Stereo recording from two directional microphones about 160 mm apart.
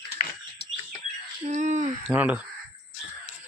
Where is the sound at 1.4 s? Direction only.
50° right (ahead or behind).